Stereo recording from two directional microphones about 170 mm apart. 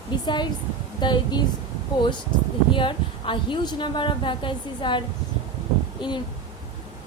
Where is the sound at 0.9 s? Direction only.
25° left (ahead or behind).